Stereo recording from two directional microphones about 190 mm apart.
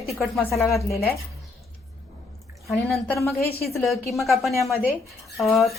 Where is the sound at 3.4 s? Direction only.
55° left (ahead or behind).